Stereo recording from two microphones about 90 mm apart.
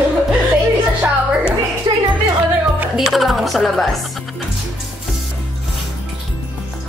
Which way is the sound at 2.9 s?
Centre (ahead or behind).